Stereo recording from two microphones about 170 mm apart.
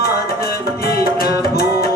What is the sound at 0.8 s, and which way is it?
Music, 60° left (ahead or behind).